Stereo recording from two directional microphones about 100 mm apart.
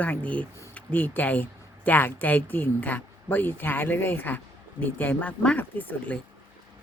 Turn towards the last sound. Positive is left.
turn(degrees=15)  # may be behind; listen again after turning